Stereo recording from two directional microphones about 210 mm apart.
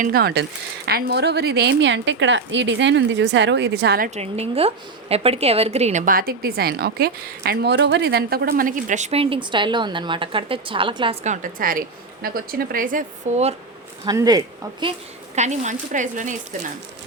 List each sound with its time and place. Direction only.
0.0 s a woman's voice: 45° right (ahead or behind); by 13.6 s 30° right (ahead or behind)
14.0 s speech: 15° right (ahead or behind)
15.4 s a woman's voice: 35° right (ahead or behind)